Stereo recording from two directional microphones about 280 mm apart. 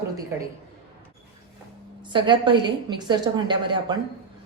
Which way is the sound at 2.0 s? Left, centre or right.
Centre.